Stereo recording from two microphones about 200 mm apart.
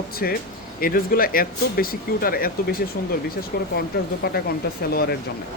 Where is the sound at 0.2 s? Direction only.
50° left (ahead or behind).